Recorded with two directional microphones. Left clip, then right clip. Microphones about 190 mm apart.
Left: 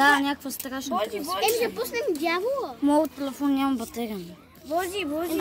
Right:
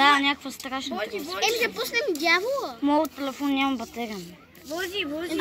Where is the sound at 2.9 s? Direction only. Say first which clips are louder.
Left 1 dB; 5° left (ahead or behind).